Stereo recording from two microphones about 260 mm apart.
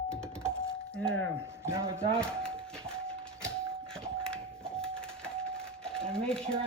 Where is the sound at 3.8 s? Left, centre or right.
Centre.